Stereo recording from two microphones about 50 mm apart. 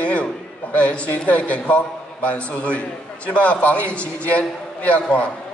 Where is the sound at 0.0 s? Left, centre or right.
Left.